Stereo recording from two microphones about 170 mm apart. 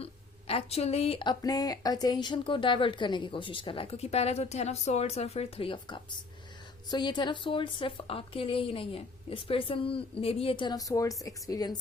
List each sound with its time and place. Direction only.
0.0 s speech: 35° left (ahead or behind)